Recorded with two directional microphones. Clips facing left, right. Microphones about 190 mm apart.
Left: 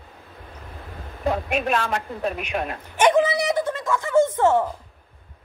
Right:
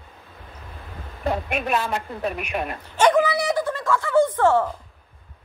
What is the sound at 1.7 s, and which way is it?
A woman's voice, 5° right (ahead or behind).